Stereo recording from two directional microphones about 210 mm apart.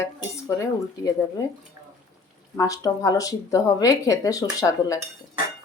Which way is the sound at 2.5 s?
15° left (ahead or behind).